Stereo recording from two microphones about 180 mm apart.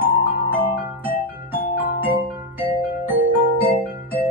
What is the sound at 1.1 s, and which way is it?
Music, 10° right (ahead or behind).